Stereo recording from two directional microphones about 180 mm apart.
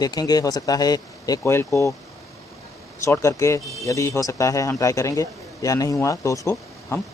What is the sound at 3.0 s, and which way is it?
Speech, 15° left (ahead or behind).